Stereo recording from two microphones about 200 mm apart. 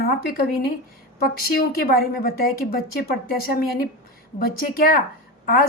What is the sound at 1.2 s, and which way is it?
A woman's voice, 50° left (ahead or behind).